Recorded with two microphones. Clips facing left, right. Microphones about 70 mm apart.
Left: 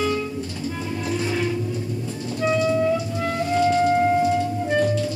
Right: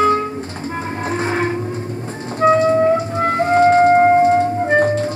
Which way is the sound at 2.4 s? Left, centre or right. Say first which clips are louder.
Right 8 dB; right.